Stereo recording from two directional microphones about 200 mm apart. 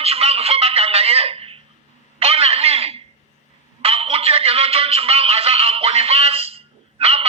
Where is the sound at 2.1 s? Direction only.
30° right (ahead or behind).